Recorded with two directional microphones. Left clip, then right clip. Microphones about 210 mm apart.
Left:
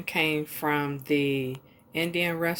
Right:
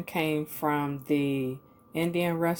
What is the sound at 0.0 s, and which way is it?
Speech, 20° right (ahead or behind).